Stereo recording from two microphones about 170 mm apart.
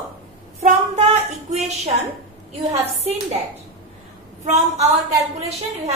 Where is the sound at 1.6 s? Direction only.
40° right (ahead or behind).